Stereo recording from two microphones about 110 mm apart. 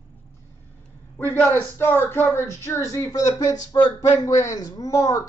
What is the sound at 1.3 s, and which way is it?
Speech, 20° left (ahead or behind).